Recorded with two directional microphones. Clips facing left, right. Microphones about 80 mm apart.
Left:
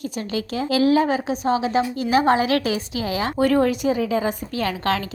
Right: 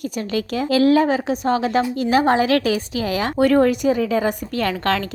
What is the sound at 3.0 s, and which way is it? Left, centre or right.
A woman's voice, right.